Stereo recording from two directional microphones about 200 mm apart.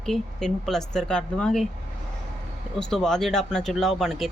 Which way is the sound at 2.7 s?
5° left (ahead or behind).